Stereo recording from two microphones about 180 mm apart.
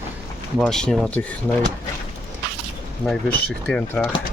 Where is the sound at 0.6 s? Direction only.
5° left (ahead or behind).